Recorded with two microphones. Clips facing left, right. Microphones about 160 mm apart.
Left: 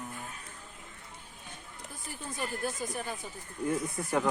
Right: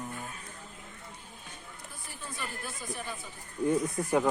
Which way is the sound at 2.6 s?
45° left (ahead or behind).